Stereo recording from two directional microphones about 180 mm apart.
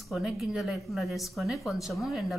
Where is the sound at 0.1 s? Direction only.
5° right (ahead or behind).